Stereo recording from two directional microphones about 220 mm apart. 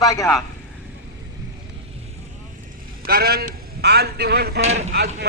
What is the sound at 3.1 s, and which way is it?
Speech, 45° right (ahead or behind).